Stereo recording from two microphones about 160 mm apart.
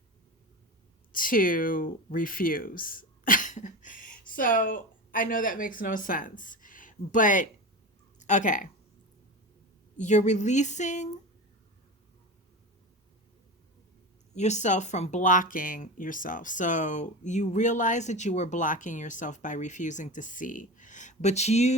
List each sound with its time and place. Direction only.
1.1 s speech: 60° left (ahead or behind)
10.0 s speech: 50° left (ahead or behind)
14.3 s speech: 45° left (ahead or behind)